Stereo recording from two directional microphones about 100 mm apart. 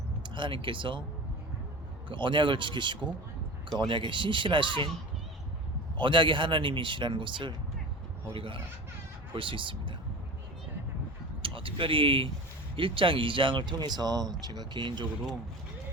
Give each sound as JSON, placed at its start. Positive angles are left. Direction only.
{"t": 0.2, "sound": "speech", "side_deg": -55}
{"t": 2.0, "sound": "speech", "side_deg": -55}
{"t": 6.0, "sound": "speech", "side_deg": -55}
{"t": 11.4, "sound": "speech", "side_deg": -60}